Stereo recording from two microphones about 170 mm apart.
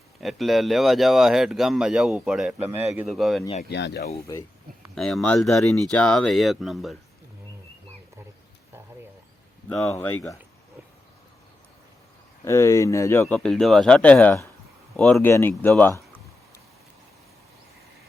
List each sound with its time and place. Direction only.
0.2 s a man's voice: centre (ahead or behind)
3.1 s speech: centre (ahead or behind)
3.6 s speech: 85° left
4.9 s speech: 5° left (ahead or behind)
9.6 s speech: centre (ahead or behind)
9.9 s speech: 15° left (ahead or behind)
12.5 s speech: 15° left (ahead or behind)
13.2 s speech: 5° left (ahead or behind)